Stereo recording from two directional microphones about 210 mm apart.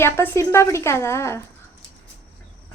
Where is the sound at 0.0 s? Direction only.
10° left (ahead or behind).